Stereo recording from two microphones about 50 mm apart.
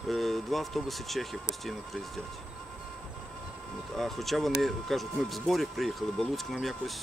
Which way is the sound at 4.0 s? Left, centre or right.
Centre.